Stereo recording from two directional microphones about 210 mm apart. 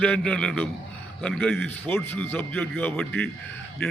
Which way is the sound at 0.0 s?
5° left (ahead or behind).